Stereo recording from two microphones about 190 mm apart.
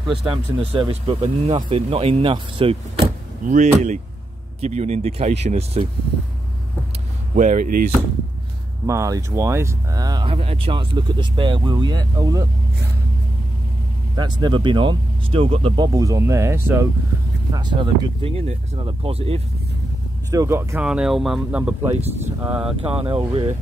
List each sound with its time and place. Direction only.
0.0 s speech: 5° right (ahead or behind)
0.3 s speech: 30° right (ahead or behind)
3.4 s speech: 40° right (ahead or behind)
7.3 s speech: 40° right (ahead or behind)
8.8 s speech: 15° right (ahead or behind)
14.1 s speech: 25° right (ahead or behind)
17.5 s speech: 25° right (ahead or behind)
20.2 s speech: 15° right (ahead or behind)
22.8 s speech: 30° right (ahead or behind)